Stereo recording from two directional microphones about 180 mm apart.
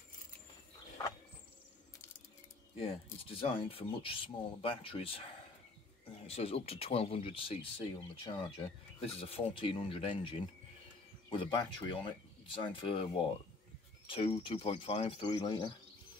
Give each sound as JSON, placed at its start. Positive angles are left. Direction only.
{"t": 2.7, "sound": "speech", "side_deg": 30}
{"t": 6.2, "sound": "speech", "side_deg": 35}